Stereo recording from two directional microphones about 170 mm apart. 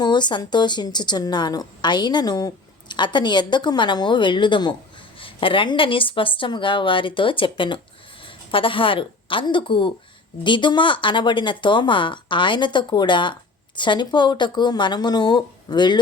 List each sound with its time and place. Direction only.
0.0 s speech: 25° left (ahead or behind)